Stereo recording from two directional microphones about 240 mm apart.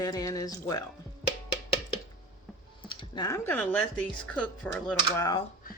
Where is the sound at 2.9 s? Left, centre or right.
Centre.